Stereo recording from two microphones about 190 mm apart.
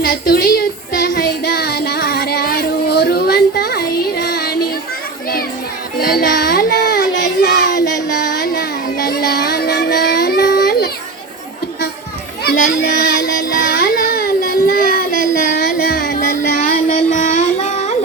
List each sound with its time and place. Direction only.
0.0 s child singing: 50° left (ahead or behind)
6.0 s child singing: 50° left (ahead or behind)
8.2 s a sound: 55° left (ahead or behind)
9.0 s child singing: 55° left (ahead or behind)
12.5 s carnatic music: 50° left (ahead or behind)